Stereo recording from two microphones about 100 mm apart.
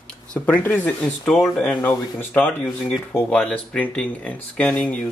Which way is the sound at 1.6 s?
20° left (ahead or behind).